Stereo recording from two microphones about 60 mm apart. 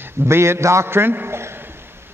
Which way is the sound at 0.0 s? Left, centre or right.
Right.